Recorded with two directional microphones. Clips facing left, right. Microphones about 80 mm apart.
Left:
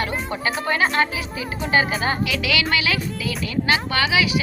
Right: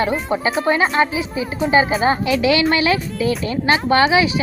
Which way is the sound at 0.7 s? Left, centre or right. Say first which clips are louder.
Right 3 dB; right.